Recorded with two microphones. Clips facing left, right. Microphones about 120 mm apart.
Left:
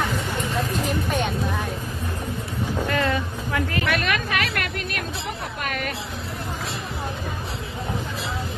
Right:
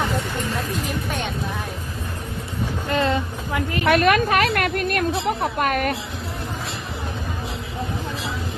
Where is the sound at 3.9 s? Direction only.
45° right (ahead or behind).